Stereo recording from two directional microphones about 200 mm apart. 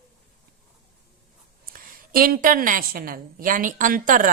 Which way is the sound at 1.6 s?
45° right (ahead or behind).